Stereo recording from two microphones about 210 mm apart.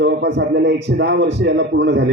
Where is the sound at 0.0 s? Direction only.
50° right (ahead or behind).